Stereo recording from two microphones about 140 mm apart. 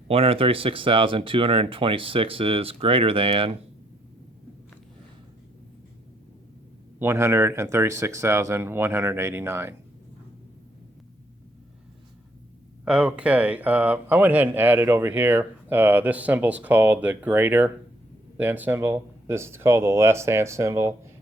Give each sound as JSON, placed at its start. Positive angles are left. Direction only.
{"t": 0.1, "sound": "speech", "side_deg": -45}
{"t": 7.0, "sound": "speech", "side_deg": -20}
{"t": 12.8, "sound": "speech", "side_deg": -5}